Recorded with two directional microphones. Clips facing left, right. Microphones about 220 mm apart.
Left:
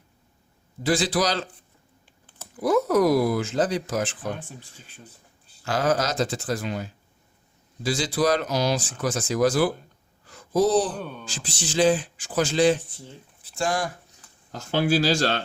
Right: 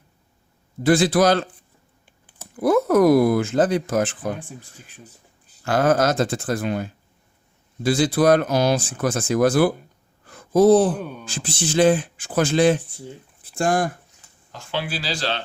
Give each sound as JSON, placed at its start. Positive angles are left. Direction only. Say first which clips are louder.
{"t": 0.8, "sound": "speech", "louder": "right 6 dB", "side_deg": -55}
{"t": 2.6, "sound": "speech", "louder": "right 4 dB", "side_deg": -55}
{"t": 5.6, "sound": "speech", "louder": "right 5 dB", "side_deg": -55}
{"t": 10.2, "sound": "a sound", "louder": "right 7 dB", "side_deg": -55}
{"t": 10.9, "sound": "speech", "louder": "right 3 dB", "side_deg": -10}
{"t": 11.3, "sound": "speech", "louder": "right 7 dB", "side_deg": -55}
{"t": 14.5, "sound": "speech", "louder": "left 6 dB", "side_deg": 45}